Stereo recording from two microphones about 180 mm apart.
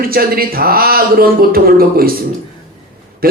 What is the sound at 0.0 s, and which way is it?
Speech, 55° right (ahead or behind).